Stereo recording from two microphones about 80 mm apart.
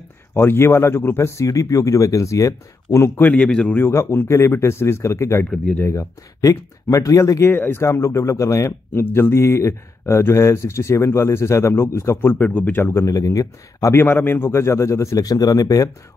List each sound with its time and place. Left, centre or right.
0.3 s speech: left
3.2 s a man's voice: centre
3.9 s speech: left
7.5 s speech: left
7.8 s speech: left
9.0 s speech: left
12.9 s speech: left
14.0 s speech: left